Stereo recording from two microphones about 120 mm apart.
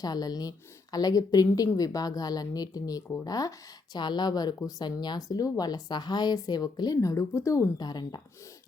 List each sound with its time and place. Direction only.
0.0 s speech: 35° left (ahead or behind)